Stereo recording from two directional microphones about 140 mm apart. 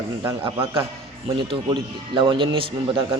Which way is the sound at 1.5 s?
35° right (ahead or behind).